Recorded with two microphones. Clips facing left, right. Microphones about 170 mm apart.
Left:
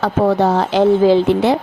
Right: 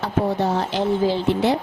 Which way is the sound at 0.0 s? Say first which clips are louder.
Left 7 dB; 85° left.